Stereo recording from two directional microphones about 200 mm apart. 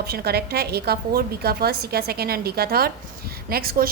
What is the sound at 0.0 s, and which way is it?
A woman's voice, 50° right (ahead or behind).